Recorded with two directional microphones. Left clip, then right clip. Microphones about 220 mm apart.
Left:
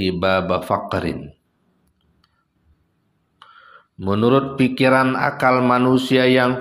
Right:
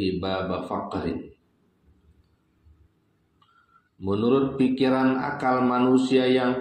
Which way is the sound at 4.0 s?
50° left (ahead or behind).